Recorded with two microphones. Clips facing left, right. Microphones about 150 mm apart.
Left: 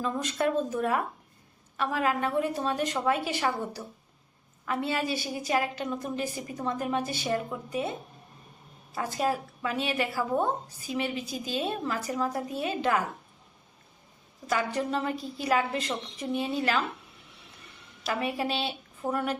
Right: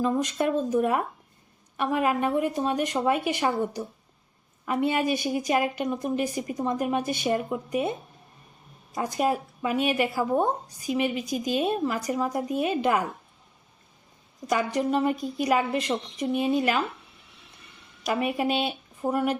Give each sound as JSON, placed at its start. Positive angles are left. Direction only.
{"t": 0.0, "sound": "a woman's voice", "side_deg": -15}
{"t": 9.0, "sound": "a woman's voice", "side_deg": -15}
{"t": 14.4, "sound": "a woman's voice", "side_deg": -15}
{"t": 18.0, "sound": "a woman's voice", "side_deg": -15}